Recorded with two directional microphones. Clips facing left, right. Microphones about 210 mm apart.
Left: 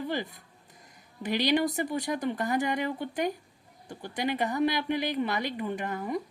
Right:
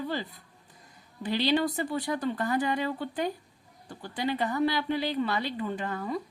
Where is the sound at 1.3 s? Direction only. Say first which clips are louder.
Even; 15° left (ahead or behind).